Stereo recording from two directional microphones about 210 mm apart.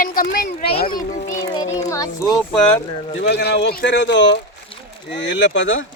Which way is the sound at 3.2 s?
50° left (ahead or behind).